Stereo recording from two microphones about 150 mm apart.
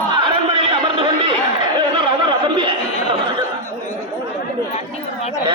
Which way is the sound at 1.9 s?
35° right (ahead or behind).